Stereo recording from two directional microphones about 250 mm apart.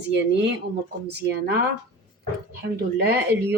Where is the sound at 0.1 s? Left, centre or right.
Right.